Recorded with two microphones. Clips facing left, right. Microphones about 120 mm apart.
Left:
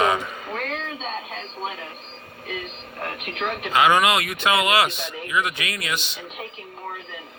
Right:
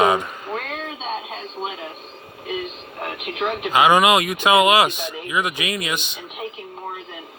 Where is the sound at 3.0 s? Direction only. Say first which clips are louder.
Right 3 dB; 15° right (ahead or behind).